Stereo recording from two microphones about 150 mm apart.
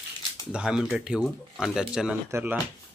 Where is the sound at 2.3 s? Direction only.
15° right (ahead or behind).